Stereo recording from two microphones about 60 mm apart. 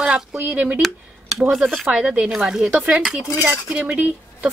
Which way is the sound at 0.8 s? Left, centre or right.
Centre.